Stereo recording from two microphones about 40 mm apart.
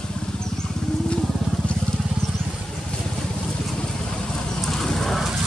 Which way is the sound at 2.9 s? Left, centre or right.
Left.